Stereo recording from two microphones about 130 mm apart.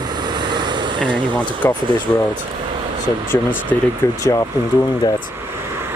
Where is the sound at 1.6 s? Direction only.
20° left (ahead or behind).